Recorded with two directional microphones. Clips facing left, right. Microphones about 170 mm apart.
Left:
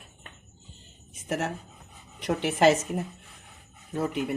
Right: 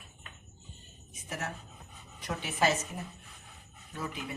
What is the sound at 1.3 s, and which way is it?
Speech, 70° left (ahead or behind).